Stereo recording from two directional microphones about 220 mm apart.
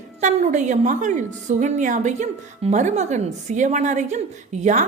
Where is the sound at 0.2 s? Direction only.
30° right (ahead or behind).